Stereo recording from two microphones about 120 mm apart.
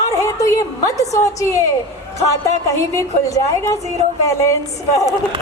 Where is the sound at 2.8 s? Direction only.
25° left (ahead or behind).